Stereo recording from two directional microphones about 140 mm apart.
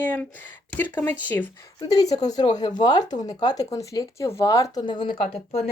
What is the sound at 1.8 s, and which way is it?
Speech, 25° left (ahead or behind).